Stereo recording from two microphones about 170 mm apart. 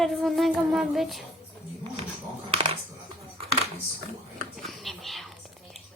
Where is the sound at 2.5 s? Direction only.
35° right (ahead or behind).